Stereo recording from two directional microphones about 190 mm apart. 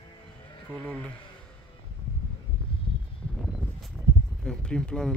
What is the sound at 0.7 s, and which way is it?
Speech, 5° left (ahead or behind).